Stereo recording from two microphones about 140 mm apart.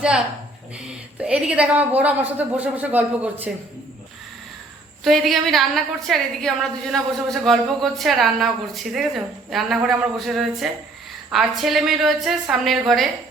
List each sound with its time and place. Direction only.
1.2 s a woman's voice: 5° right (ahead or behind)
5.0 s a woman's voice: centre (ahead or behind)